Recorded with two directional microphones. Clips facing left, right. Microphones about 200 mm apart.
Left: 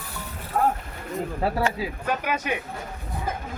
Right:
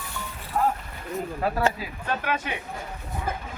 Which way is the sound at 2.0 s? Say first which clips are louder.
Even; 10° left (ahead or behind).